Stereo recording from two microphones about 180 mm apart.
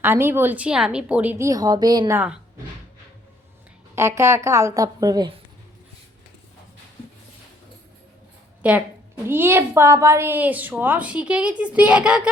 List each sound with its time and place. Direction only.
0.0 s a woman's voice: 10° right (ahead or behind)
3.9 s a woman's voice: 15° right (ahead or behind)
8.6 s a woman's voice: 5° right (ahead or behind)